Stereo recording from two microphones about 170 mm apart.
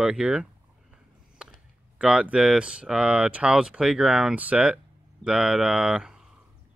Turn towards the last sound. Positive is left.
turn(degrees=-5)  # may be behind; listen again after turning